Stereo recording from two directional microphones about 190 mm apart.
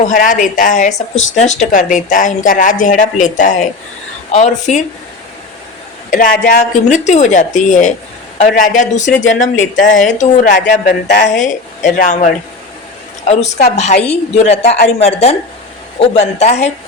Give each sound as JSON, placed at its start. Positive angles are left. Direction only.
{"t": 0.1, "sound": "speech", "side_deg": 45}
{"t": 6.1, "sound": "speech", "side_deg": 45}
{"t": 9.2, "sound": "speech", "side_deg": 85}
{"t": 10.2, "sound": "speech", "side_deg": 40}